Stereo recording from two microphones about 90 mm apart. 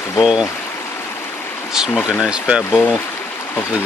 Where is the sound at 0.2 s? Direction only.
5° right (ahead or behind).